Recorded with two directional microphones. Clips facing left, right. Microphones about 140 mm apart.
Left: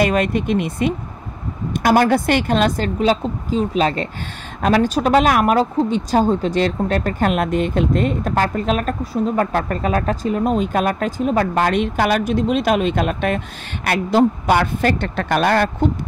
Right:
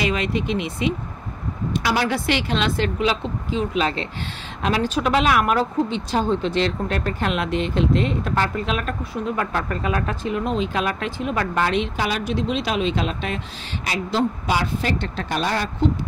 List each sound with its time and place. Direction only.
0.0 s a woman's voice: 50° left (ahead or behind)